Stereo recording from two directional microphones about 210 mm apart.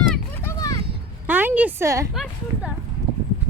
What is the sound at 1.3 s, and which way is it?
Speech, 10° right (ahead or behind).